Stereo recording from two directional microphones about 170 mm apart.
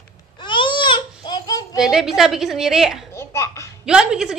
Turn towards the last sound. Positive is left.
turn(degrees=-5)  # may be behind; listen again after turning